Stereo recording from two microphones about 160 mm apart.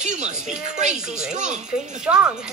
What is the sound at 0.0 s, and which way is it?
Music, 45° right (ahead or behind).